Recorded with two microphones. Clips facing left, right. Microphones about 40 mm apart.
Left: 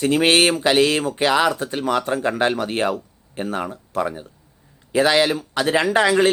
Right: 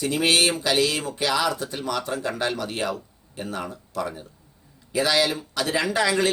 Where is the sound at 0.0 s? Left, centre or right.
Left.